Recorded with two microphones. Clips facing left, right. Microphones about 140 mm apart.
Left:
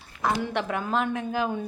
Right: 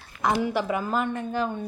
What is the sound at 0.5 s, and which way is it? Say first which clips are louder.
A woman's voice: right 1 dB; 5° right (ahead or behind).